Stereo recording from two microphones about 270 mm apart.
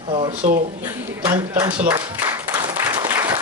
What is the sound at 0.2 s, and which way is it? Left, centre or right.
Speech, right.